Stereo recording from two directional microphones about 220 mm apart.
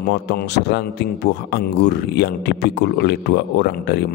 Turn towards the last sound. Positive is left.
turn(degrees=50)  # may be behind; listen again after turning